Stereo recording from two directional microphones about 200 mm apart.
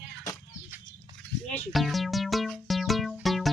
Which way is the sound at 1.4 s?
Centre (ahead or behind).